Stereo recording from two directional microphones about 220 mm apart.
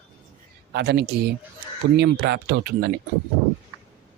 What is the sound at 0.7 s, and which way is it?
Speech, 50° right (ahead or behind).